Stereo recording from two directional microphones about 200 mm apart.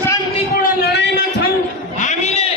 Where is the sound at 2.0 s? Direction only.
35° left (ahead or behind).